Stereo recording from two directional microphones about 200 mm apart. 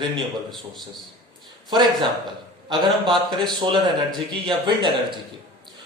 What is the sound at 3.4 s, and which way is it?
A man's voice, 20° right (ahead or behind).